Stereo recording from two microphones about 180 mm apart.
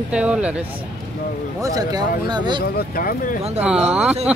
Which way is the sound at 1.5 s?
20° right (ahead or behind).